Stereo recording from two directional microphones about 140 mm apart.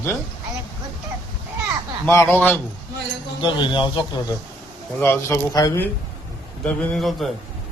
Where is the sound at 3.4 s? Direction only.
35° left (ahead or behind).